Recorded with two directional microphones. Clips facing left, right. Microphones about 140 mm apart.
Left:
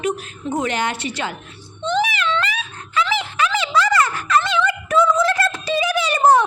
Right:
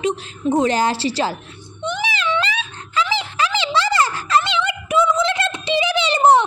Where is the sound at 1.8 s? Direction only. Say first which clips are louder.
Left 6 dB; 15° right (ahead or behind).